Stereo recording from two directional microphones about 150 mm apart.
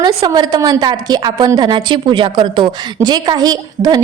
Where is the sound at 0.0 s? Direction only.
30° right (ahead or behind).